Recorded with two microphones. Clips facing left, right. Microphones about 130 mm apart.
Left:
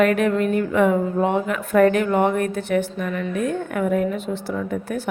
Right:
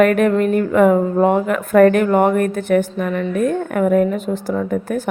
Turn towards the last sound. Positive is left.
turn(degrees=-45)  # may be behind; listen again after turning